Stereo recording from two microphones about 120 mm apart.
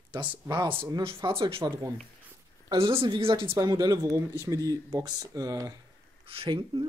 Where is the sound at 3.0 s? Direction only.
45° right (ahead or behind).